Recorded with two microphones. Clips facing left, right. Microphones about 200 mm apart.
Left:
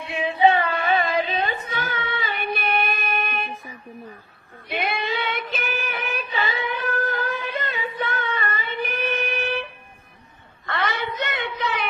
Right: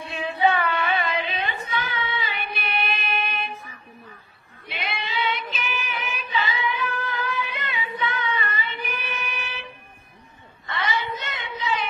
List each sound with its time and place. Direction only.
0.7 s a sound: 35° left (ahead or behind)
1.6 s child singing: 50° left (ahead or behind)
4.6 s child singing: 50° left (ahead or behind)
10.7 s child singing: 60° left (ahead or behind)